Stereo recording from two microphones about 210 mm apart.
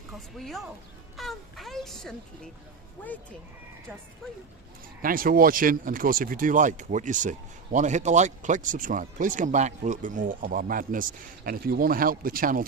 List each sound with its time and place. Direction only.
0.1 s speech: centre (ahead or behind)
5.0 s speech: 40° right (ahead or behind)